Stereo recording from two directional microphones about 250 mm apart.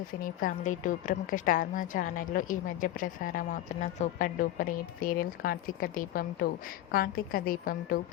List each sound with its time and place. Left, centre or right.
0.2 s a woman's voice: left